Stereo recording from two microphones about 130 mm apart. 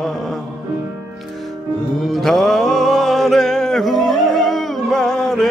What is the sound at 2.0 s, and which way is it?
Music, centre (ahead or behind).